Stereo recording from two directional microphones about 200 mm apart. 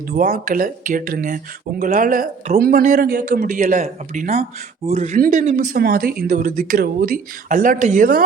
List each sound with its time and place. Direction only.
0.1 s a man's voice: 45° right (ahead or behind)